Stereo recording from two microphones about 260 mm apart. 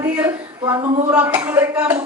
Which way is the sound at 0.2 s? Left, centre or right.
Centre.